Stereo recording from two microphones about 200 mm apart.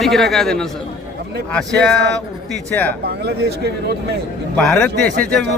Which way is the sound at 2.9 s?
55° right (ahead or behind).